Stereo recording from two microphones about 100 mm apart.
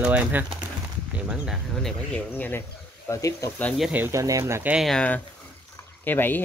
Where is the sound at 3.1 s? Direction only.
30° left (ahead or behind).